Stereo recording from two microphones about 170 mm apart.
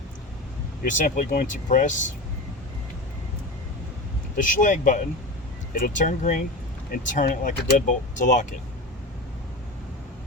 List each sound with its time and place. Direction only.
0.9 s speech: 50° left (ahead or behind)
4.4 s speech: 50° left (ahead or behind)